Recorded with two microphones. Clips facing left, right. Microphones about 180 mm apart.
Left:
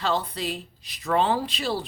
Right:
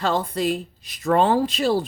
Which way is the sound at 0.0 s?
45° right (ahead or behind).